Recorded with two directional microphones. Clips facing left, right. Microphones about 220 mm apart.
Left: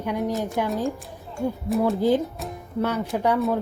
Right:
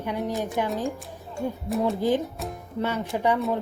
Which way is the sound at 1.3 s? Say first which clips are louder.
Left 3 dB; centre (ahead or behind).